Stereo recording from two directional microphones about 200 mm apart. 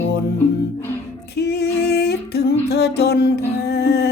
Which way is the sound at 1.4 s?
55° left (ahead or behind).